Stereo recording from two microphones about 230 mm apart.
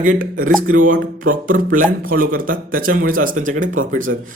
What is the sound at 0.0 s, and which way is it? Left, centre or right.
A man's voice, right.